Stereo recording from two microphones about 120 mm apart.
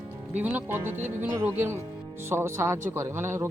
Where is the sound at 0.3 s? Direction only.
15° right (ahead or behind).